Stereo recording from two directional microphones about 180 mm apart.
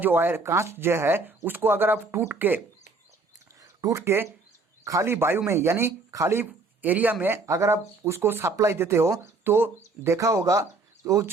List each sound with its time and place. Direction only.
0.0 s speech: 10° right (ahead or behind)
3.6 s speech: 20° right (ahead or behind)